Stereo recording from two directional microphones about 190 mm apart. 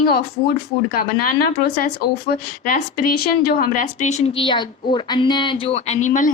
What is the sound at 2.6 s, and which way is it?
A woman's voice, 45° left (ahead or behind).